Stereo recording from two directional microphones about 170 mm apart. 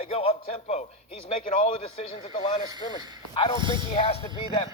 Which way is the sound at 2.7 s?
25° right (ahead or behind).